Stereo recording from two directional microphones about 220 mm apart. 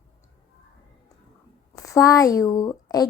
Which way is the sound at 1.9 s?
15° left (ahead or behind).